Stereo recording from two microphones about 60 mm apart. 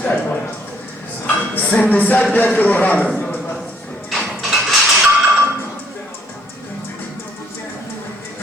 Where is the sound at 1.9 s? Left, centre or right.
Left.